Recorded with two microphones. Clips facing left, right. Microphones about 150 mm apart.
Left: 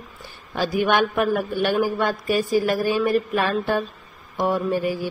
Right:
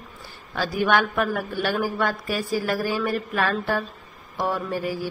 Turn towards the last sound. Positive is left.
turn(degrees=20)  # may be behind; listen again after turning